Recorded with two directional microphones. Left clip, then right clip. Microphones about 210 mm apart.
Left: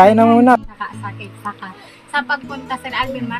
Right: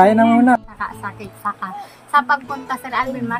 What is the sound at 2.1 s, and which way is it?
Speech, 5° right (ahead or behind).